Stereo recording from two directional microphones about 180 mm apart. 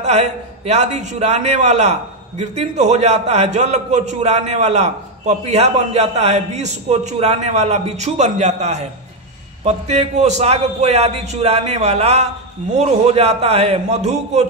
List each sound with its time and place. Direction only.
0.7 s a man's voice: 40° right (ahead or behind)